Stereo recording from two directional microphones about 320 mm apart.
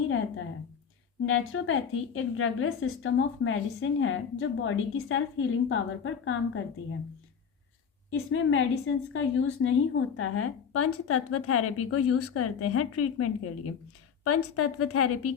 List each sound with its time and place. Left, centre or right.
1.2 s a woman's voice: left
8.1 s a woman's voice: left